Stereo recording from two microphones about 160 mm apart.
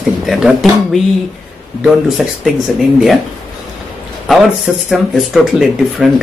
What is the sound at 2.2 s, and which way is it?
Speech, centre (ahead or behind).